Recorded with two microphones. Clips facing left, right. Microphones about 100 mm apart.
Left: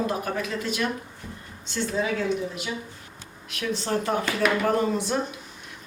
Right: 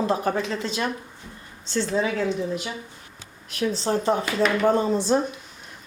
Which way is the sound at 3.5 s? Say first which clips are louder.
Right 3 dB; 35° right (ahead or behind).